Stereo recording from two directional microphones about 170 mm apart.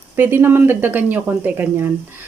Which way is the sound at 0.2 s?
15° right (ahead or behind).